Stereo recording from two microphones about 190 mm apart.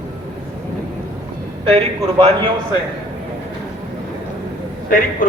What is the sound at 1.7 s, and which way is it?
Speech, 30° right (ahead or behind).